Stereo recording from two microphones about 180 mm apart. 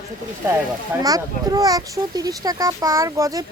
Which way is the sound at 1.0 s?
20° right (ahead or behind).